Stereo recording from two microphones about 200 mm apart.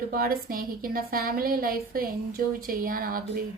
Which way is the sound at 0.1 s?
45° right (ahead or behind).